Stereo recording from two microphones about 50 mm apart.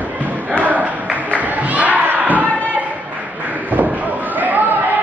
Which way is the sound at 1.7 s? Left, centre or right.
Right.